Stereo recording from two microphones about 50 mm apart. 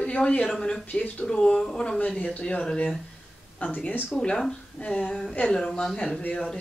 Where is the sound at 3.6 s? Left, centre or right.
Left.